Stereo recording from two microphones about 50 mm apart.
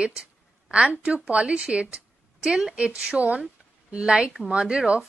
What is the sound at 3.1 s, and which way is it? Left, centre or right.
Speech, right.